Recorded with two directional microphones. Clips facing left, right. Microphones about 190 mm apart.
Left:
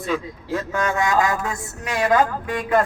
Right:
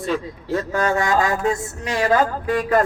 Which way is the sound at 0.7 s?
35° right (ahead or behind).